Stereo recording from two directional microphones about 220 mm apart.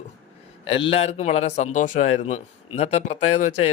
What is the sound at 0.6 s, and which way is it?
A man's voice, 25° left (ahead or behind).